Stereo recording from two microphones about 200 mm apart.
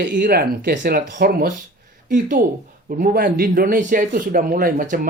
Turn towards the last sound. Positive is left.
turn(degrees=-45)  # may be behind; listen again after turning